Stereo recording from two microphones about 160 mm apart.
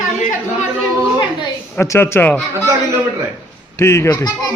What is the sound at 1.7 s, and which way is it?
Speech, 15° left (ahead or behind).